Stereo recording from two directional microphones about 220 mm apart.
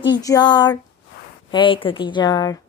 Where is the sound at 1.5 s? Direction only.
20° left (ahead or behind).